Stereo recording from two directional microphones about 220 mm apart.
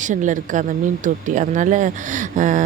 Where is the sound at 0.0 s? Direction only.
35° right (ahead or behind).